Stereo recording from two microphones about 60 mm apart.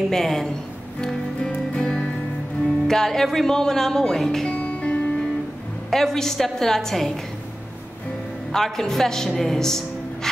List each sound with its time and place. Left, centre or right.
0.1 s a woman's voice: centre
1.0 s music: centre
2.6 s speech: centre
4.5 s music: left
5.9 s a woman's voice: centre
8.5 s speech: centre